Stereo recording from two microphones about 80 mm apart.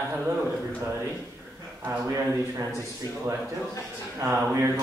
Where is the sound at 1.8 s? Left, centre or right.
Right.